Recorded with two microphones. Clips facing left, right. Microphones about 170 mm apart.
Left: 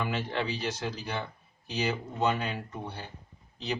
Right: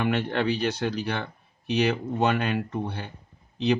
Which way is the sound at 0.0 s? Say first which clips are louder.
Right 7 dB; 65° right (ahead or behind).